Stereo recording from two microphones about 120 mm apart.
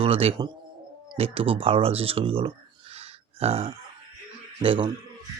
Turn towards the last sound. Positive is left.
turn(degrees=-45)  # may be behind; listen again after turning